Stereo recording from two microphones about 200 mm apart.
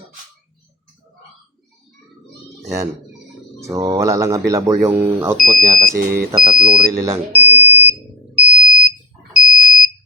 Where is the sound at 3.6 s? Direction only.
15° right (ahead or behind).